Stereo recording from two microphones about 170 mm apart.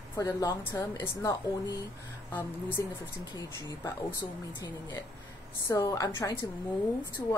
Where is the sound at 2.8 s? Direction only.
20° left (ahead or behind).